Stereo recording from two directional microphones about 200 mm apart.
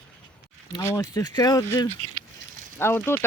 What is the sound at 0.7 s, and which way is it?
Speech, 15° left (ahead or behind).